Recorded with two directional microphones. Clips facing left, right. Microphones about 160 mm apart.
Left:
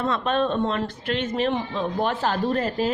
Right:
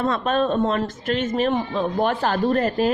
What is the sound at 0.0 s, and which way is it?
A woman's voice, 45° right (ahead or behind).